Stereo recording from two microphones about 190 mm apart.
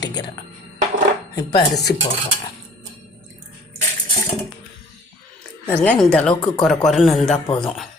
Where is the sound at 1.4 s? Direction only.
20° left (ahead or behind).